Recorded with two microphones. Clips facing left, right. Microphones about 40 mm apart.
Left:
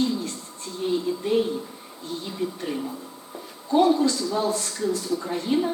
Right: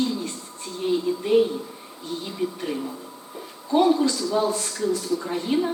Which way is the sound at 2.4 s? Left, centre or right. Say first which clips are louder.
Right 1 dB; centre.